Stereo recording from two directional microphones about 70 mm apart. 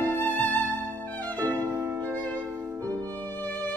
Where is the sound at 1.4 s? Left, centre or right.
Right.